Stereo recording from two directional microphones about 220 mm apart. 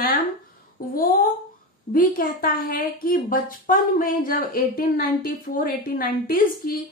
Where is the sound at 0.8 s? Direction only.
40° left (ahead or behind).